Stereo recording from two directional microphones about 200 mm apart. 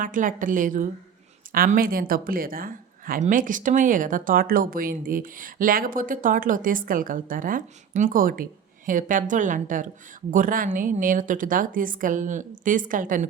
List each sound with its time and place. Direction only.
0.0 s a woman's voice: 40° right (ahead or behind)